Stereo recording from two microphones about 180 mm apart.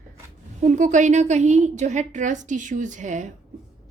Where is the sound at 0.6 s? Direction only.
45° right (ahead or behind).